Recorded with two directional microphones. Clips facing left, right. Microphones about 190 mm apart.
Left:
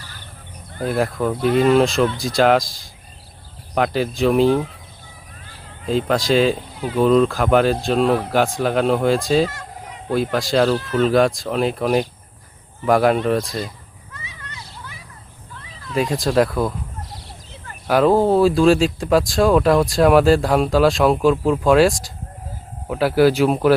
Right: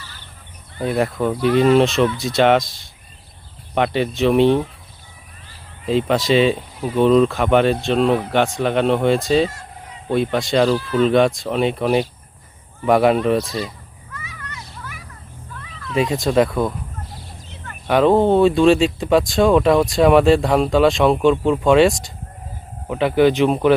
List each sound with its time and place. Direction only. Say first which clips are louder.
0.9 s speech: right 1 dB; centre (ahead or behind)
5.8 s speech: right 1 dB; centre (ahead or behind)
9.5 s fowl: left 3 dB; 90° left
10.3 s speech: even; centre (ahead or behind)
14.1 s music: right 3 dB; 25° left (ahead or behind)
15.5 s cat: right 2 dB; 30° left (ahead or behind)
16.0 s speech: right 1 dB; centre (ahead or behind)
17.8 s speech: right 1 dB; centre (ahead or behind)